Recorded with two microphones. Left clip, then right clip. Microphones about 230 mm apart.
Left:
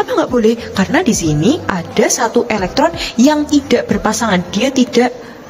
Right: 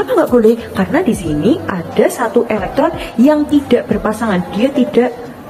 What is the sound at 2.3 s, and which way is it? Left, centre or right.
A woman's voice, left.